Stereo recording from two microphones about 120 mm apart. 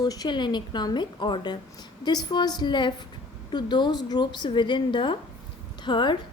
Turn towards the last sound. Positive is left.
turn(degrees=40)  # may be behind; listen again after turning